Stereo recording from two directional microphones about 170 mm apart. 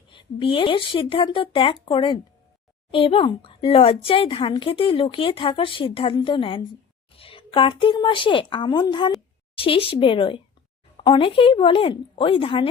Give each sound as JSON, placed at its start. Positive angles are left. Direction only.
{"t": 0.1, "sound": "speech", "side_deg": 30}